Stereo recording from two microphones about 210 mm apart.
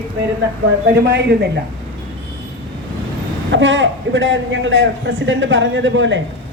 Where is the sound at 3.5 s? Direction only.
60° right (ahead or behind).